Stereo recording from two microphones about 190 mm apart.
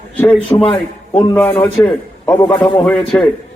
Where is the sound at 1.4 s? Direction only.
10° left (ahead or behind).